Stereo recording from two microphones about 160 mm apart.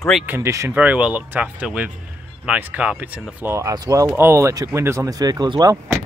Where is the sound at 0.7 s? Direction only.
5° right (ahead or behind).